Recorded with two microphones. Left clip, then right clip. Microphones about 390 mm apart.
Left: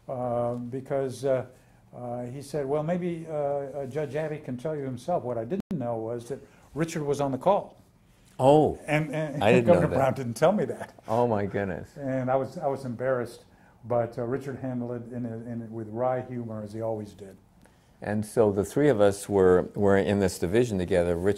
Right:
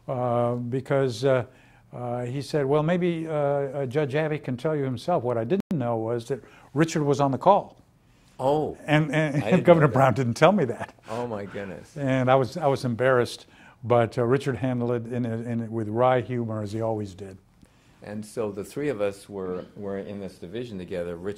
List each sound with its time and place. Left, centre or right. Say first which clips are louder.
0.0 s a sound: right 4 dB; right
2.0 s speech: right 4 dB; right
8.4 s speech: left 4 dB; centre
8.8 s speech: right 5 dB; right
11.1 s speech: left 8 dB; centre
12.0 s a man's voice: right 6 dB; right
16.7 s speech: right 2 dB; right
18.0 s speech: left 7 dB; left
19.2 s speech: left 12 dB; left